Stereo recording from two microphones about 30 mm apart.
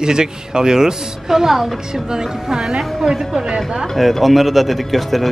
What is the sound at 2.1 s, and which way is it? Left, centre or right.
Speech, centre.